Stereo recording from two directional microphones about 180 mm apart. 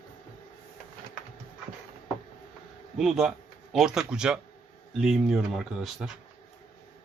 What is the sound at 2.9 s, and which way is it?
Speech, centre (ahead or behind).